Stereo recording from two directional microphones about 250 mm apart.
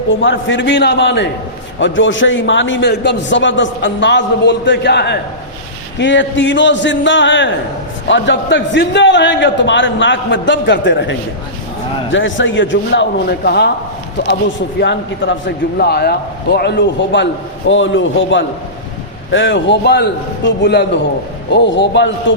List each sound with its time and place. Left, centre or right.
0.1 s a man's voice: left
12.1 s a man's voice: left
14.8 s a man's voice: left